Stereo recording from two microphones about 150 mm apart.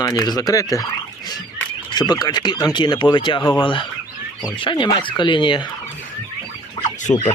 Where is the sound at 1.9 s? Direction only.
30° left (ahead or behind).